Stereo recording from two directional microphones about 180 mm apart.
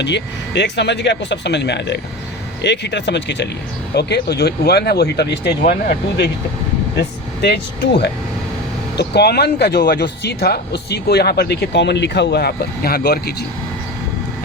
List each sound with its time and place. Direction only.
0.0 s speech: 75° left (ahead or behind)